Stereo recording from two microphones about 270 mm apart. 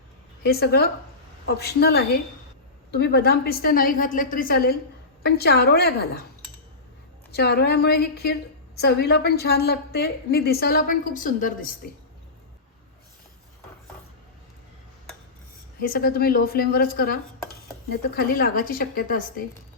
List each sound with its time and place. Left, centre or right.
0.4 s a woman's voice: left
7.3 s a woman's voice: left
15.8 s a woman's voice: left